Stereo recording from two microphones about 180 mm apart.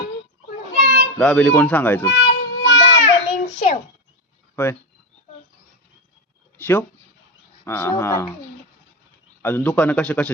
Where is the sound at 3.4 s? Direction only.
35° left (ahead or behind).